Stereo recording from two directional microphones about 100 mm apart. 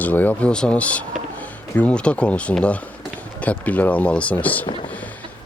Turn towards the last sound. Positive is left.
turn(degrees=15)  # may be behind; listen again after turning